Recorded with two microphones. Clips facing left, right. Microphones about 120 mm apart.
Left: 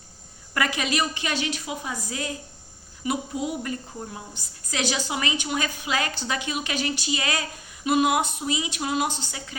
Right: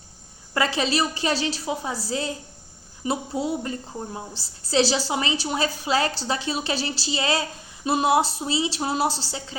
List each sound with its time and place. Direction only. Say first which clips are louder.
0.5 s a woman's voice: right 3 dB; 30° right (ahead or behind)